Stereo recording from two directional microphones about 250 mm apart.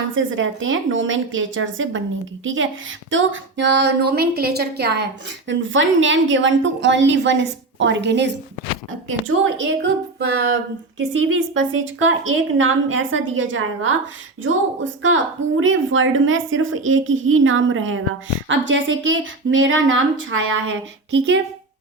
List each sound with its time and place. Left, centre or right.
0.1 s a woman's voice: right